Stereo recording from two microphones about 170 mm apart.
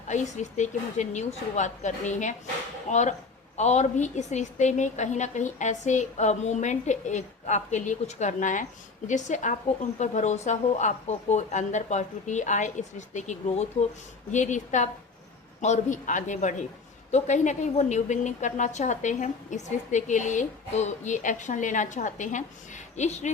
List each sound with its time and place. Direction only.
0.1 s a woman's voice: 45° left (ahead or behind)